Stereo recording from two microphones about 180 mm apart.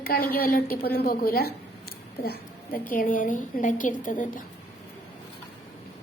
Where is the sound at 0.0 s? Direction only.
55° left (ahead or behind).